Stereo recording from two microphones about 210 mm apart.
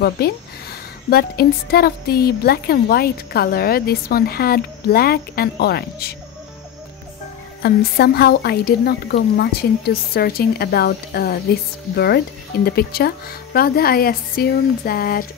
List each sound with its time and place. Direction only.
0.2 s a woman's voice: 50° left (ahead or behind)
7.6 s a woman's voice: 50° left (ahead or behind)